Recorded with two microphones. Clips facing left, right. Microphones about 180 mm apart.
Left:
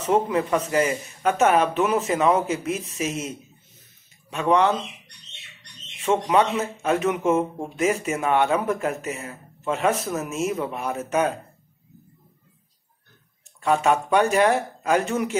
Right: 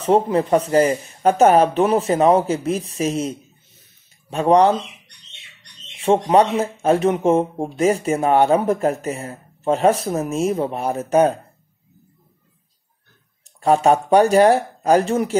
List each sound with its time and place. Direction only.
0.0 s speech: 35° right (ahead or behind)
5.9 s speech: 30° right (ahead or behind)
13.6 s speech: 35° right (ahead or behind)